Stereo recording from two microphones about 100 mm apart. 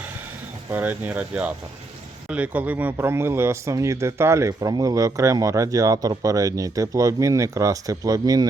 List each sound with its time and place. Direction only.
0.7 s a man's voice: 15° right (ahead or behind); by 8.4 s 40° right (ahead or behind)